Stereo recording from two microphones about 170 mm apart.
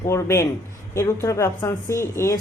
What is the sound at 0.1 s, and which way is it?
Speech, 15° left (ahead or behind).